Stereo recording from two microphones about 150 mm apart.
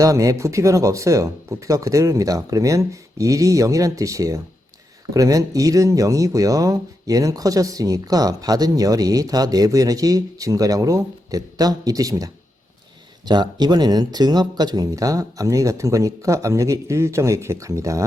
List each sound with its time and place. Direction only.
0.0 s speech: 20° right (ahead or behind)